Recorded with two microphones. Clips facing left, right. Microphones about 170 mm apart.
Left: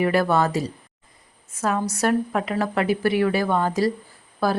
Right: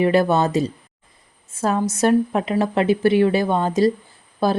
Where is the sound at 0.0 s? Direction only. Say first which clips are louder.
Right 3 dB; 20° right (ahead or behind).